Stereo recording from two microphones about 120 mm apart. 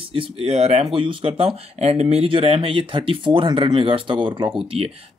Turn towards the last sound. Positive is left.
turn(degrees=-40)  # may be behind; listen again after turning